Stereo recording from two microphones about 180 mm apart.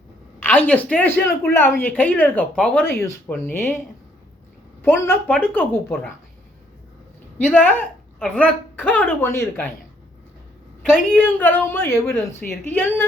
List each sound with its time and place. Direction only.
0.3 s a woman's voice: 10° left (ahead or behind)
4.9 s a woman's voice: 10° left (ahead or behind)
7.3 s a woman's voice: 10° left (ahead or behind)
10.9 s a woman's voice: 5° left (ahead or behind)